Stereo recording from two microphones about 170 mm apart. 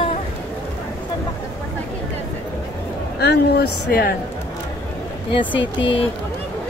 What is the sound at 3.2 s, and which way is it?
Speech, 70° left (ahead or behind).